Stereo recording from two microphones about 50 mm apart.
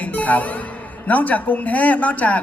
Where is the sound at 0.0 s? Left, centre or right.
Left.